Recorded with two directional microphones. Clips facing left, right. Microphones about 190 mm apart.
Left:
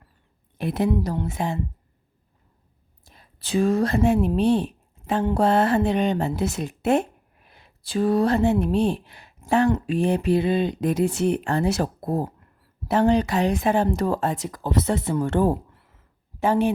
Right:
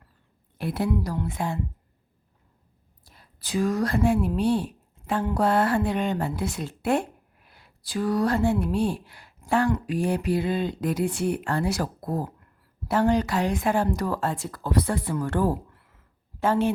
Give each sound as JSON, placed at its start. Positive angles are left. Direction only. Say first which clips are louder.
{"t": 0.6, "sound": "speech", "louder": "left 3 dB", "side_deg": 20}
{"t": 3.0, "sound": "speech", "louder": "left 2 dB", "side_deg": 20}